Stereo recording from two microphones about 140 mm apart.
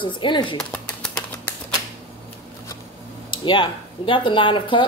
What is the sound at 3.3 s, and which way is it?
Speech, 35° left (ahead or behind).